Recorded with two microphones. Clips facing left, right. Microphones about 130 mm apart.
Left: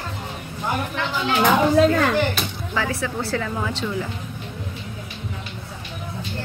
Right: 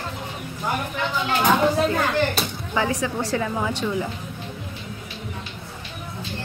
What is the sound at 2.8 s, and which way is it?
A woman's voice, 15° right (ahead or behind).